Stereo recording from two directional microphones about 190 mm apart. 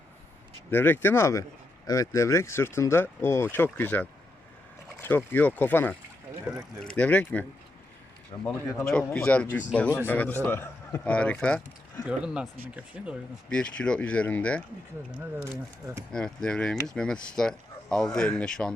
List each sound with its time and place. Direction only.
0.7 s speech: 10° left (ahead or behind)
8.4 s speech: 10° left (ahead or behind)
12.0 s speech: 5° right (ahead or behind)
13.5 s speech: 5° left (ahead or behind)
16.1 s speech: 5° left (ahead or behind)